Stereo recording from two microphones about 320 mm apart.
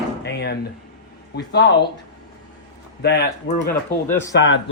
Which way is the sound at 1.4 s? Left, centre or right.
Left.